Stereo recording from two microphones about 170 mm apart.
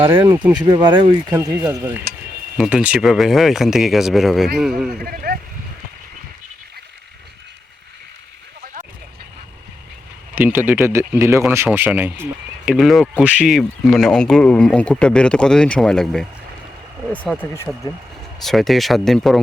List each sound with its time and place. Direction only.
0.5 s speech: 25° right (ahead or behind)
2.6 s speech: 5° right (ahead or behind)
5.0 s speech: 60° right (ahead or behind)
10.3 s speech: 10° right (ahead or behind)
12.7 s speech: centre (ahead or behind)